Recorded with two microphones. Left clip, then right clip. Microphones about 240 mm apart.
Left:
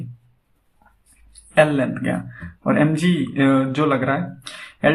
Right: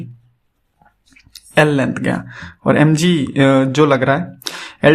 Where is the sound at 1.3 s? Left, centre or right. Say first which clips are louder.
Right 2 dB; right.